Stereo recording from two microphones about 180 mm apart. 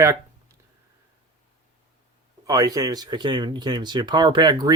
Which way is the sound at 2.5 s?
20° right (ahead or behind).